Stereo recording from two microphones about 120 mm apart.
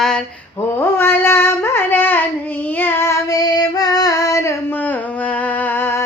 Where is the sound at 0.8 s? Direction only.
20° left (ahead or behind).